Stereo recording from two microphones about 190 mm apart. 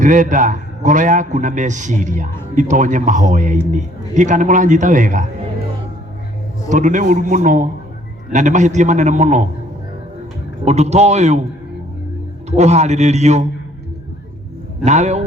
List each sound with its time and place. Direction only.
0.0 s a man's voice: 40° right (ahead or behind)
6.7 s a man's voice: 40° right (ahead or behind)
10.7 s a man's voice: 35° right (ahead or behind)
12.5 s a man's voice: 35° right (ahead or behind)
14.8 s a man's voice: 35° right (ahead or behind)